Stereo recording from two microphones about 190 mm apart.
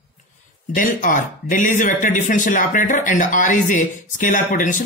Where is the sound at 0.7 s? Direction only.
45° left (ahead or behind).